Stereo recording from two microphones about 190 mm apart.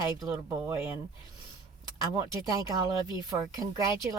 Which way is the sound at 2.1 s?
20° right (ahead or behind).